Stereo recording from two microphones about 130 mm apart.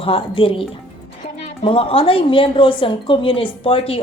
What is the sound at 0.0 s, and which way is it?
Speech, 45° left (ahead or behind).